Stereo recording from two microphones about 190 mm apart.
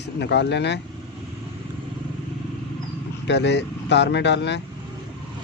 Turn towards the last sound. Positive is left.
turn(degrees=65)  # may be behind; listen again after turning